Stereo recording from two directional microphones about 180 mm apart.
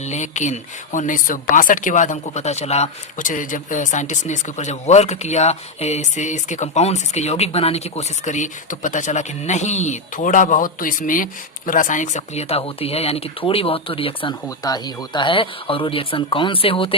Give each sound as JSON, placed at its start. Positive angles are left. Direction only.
{"t": 0.0, "sound": "speech", "side_deg": 40}